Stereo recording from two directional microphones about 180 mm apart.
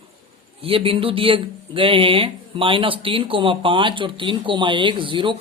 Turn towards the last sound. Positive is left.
turn(degrees=-30)  # may be behind; listen again after turning